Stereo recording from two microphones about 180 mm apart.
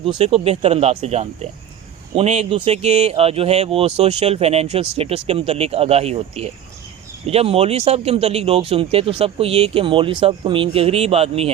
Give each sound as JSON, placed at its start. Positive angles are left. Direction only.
{"t": 0.0, "sound": "speech", "side_deg": -30}